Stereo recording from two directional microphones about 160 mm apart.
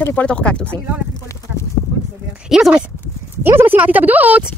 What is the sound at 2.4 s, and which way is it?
Speech, 5° right (ahead or behind).